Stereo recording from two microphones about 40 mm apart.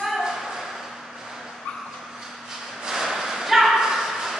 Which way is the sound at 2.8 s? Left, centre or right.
Centre.